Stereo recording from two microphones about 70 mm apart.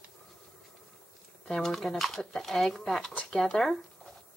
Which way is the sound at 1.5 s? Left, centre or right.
Centre.